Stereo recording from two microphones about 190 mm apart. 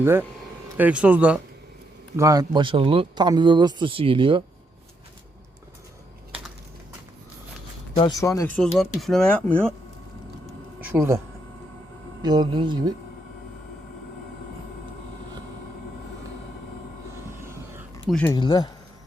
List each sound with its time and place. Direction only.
0.0 s speech: 10° right (ahead or behind)
2.1 s speech: 20° right (ahead or behind)
7.9 s speech: 20° left (ahead or behind)
8.5 s speech: centre (ahead or behind)
10.9 s speech: 15° right (ahead or behind)
12.2 s speech: 20° right (ahead or behind)
17.4 s wild animals: 15° right (ahead or behind)
18.1 s speech: 10° left (ahead or behind)
18.3 s speech: 25° left (ahead or behind)